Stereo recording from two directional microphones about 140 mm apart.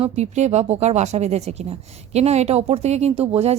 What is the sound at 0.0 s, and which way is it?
Speech, 55° right (ahead or behind).